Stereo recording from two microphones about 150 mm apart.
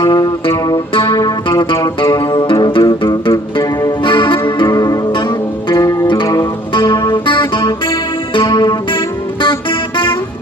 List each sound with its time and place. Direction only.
0.0 s music: 30° left (ahead or behind)